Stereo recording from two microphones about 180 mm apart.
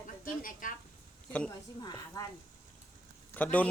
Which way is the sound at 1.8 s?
20° left (ahead or behind).